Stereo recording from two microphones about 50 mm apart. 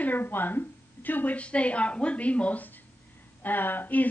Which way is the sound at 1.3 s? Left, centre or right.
Left.